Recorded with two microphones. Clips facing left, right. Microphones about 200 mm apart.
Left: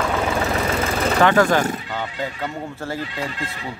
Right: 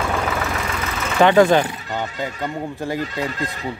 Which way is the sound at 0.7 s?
35° left (ahead or behind).